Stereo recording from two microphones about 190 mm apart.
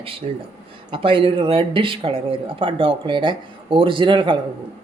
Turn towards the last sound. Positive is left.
turn(degrees=-25)  # may be behind; listen again after turning